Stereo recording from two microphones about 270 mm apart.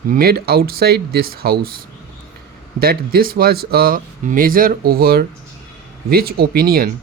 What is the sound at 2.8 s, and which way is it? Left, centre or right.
Speech, right.